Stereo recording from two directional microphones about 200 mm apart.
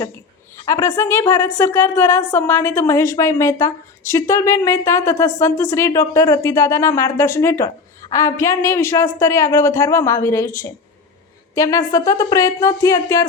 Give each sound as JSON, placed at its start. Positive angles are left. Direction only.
{"t": 0.5, "sound": "a woman's voice", "side_deg": 15}